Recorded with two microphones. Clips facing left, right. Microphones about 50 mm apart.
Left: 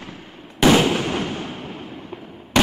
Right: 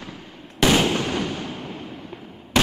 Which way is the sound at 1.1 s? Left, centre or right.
Left.